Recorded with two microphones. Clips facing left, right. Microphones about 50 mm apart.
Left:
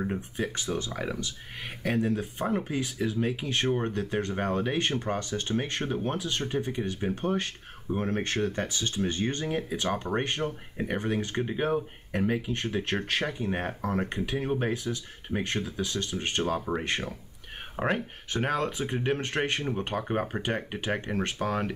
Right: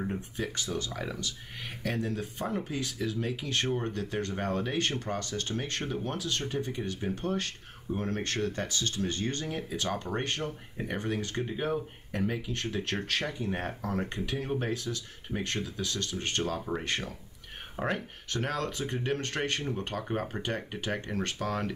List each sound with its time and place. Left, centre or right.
0.0 s speech: left